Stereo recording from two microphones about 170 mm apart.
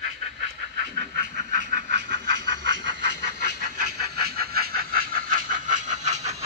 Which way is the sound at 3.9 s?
65° right (ahead or behind).